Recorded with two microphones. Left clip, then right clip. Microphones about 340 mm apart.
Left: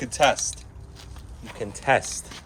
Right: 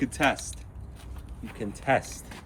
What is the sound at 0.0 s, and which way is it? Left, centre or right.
Speech, centre.